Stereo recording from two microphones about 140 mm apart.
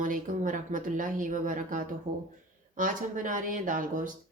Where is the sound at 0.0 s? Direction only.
70° right (ahead or behind).